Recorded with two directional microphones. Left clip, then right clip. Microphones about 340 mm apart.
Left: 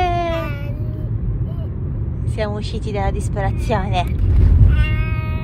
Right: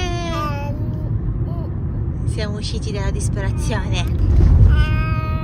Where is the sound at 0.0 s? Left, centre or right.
Centre.